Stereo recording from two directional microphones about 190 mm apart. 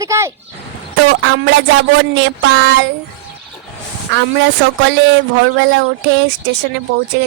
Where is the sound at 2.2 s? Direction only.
90° right.